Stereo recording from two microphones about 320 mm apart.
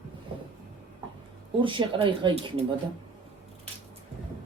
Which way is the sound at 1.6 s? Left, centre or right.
Centre.